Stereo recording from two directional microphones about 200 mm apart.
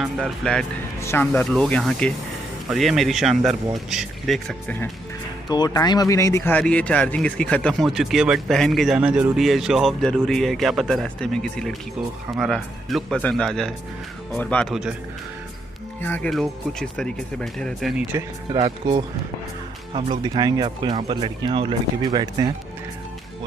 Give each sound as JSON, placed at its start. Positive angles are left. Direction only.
{"t": 0.0, "sound": "speech", "side_deg": 0}
{"t": 5.5, "sound": "speech", "side_deg": 20}
{"t": 16.0, "sound": "speech", "side_deg": 5}
{"t": 18.5, "sound": "speech", "side_deg": -20}